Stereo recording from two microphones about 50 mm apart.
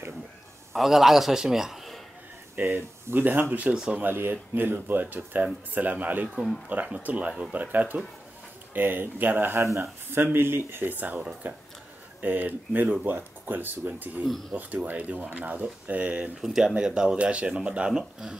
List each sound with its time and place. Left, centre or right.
0.7 s a man's voice: centre
2.6 s speech: right
3.7 s speech: centre
4.0 s speech: right
16.3 s a man's voice: centre